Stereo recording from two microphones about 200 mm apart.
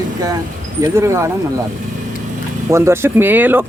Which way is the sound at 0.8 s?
15° right (ahead or behind).